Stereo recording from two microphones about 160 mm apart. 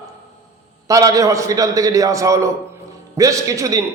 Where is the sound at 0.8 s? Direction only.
20° right (ahead or behind).